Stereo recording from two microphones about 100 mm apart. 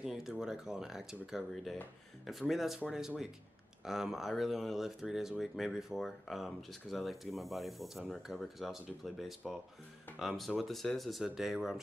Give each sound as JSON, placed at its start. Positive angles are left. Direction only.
{"t": 0.0, "sound": "speech", "side_deg": -5}